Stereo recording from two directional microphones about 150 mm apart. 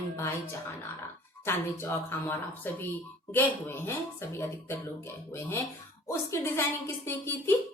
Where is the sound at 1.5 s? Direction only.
15° left (ahead or behind).